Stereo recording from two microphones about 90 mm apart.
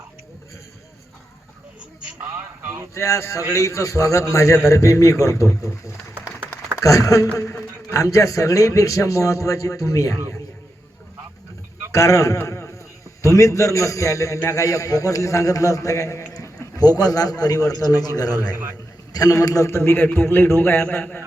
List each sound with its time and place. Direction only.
2.2 s a sound: 25° right (ahead or behind)
2.9 s a man's voice: 35° left (ahead or behind)
11.9 s a man's voice: 35° left (ahead or behind)